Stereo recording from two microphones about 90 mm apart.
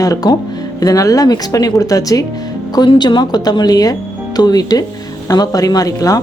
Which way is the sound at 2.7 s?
55° left (ahead or behind).